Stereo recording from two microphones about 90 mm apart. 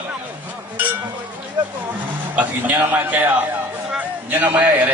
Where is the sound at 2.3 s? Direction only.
20° right (ahead or behind).